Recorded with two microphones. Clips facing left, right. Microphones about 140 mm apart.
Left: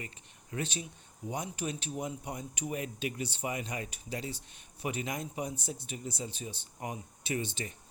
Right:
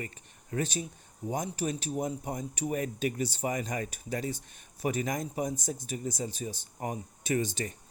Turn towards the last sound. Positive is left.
turn(degrees=-40)  # may be behind; listen again after turning